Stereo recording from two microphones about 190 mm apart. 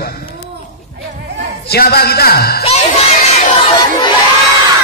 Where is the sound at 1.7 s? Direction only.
55° left (ahead or behind).